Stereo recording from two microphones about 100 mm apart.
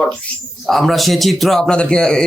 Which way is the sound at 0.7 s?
Centre (ahead or behind).